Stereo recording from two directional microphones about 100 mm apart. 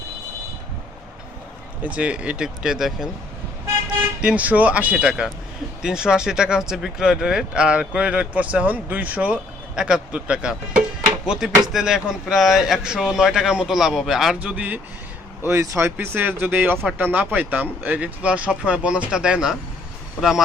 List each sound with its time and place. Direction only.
1.8 s speech: 15° right (ahead or behind)
4.2 s speech: 10° right (ahead or behind)
14.3 s speech: 15° right (ahead or behind)
15.4 s speech: 30° right (ahead or behind); by 19.5 s 5° right (ahead or behind)